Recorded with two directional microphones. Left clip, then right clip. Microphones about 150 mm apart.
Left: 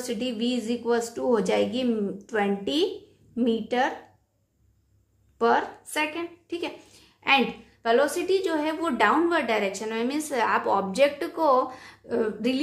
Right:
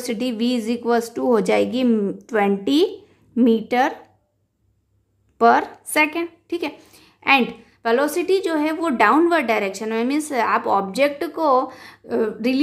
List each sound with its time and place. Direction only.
0.0 s a woman's voice: 45° right (ahead or behind)
5.4 s a woman's voice: 45° right (ahead or behind)